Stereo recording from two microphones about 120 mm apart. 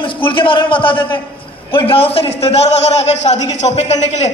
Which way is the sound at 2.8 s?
70° left (ahead or behind).